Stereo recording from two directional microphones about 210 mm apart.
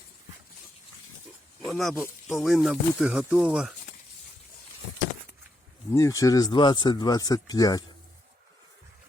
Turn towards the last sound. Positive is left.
turn(degrees=15)  # may be behind; listen again after turning